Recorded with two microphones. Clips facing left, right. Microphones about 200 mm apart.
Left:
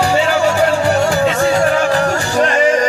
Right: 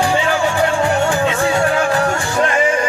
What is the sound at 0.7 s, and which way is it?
Music, 40° left (ahead or behind).